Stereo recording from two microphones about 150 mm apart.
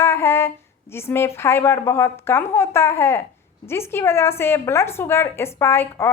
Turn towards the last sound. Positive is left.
turn(degrees=15)  # may be behind; listen again after turning